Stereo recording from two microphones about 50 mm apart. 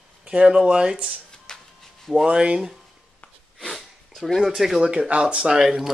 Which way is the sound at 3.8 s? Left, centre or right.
Centre.